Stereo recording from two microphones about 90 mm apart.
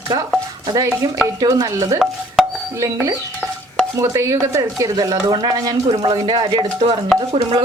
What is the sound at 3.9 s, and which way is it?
Speech, 35° right (ahead or behind).